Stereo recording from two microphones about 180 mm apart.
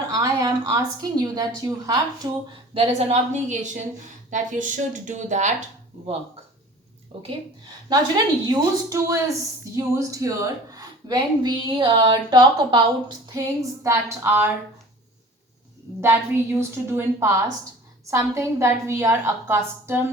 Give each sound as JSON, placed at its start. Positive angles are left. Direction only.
{"t": 0.2, "sound": "speech", "side_deg": -20}
{"t": 2.7, "sound": "a woman's voice", "side_deg": -35}
{"t": 7.1, "sound": "speech", "side_deg": -30}
{"t": 16.0, "sound": "a woman's voice", "side_deg": -15}